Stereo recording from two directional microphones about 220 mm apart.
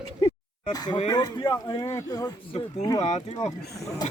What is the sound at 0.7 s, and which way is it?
Speech, 15° left (ahead or behind).